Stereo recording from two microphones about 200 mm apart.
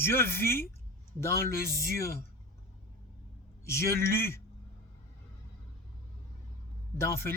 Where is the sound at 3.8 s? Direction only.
15° left (ahead or behind).